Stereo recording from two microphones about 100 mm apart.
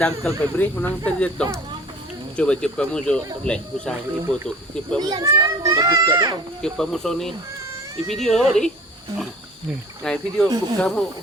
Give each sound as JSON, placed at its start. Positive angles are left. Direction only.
{"t": 0.2, "sound": "speech", "side_deg": 10}
{"t": 4.9, "sound": "a child's voice", "side_deg": -40}
{"t": 5.9, "sound": "a child's voice", "side_deg": -30}
{"t": 6.6, "sound": "speech", "side_deg": 5}
{"t": 10.0, "sound": "speech", "side_deg": 10}